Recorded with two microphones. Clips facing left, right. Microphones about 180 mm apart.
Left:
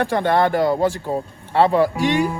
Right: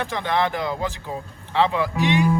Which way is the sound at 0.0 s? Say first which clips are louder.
Left 6 dB; 50° left (ahead or behind).